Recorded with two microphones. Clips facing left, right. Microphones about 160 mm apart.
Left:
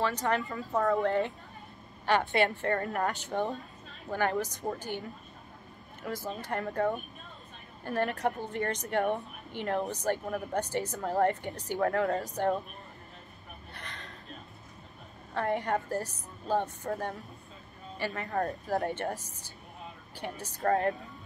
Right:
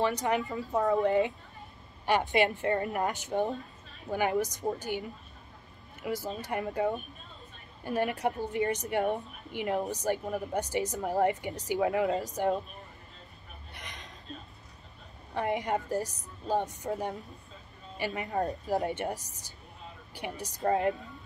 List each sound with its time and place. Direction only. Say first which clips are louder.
0.0 s a woman's voice: right 1 dB; 15° right (ahead or behind)
6.0 s a woman's voice: right 2 dB; 10° right (ahead or behind)
13.7 s chuckle: even; 15° right (ahead or behind)
15.3 s a woman's voice: even; 15° right (ahead or behind)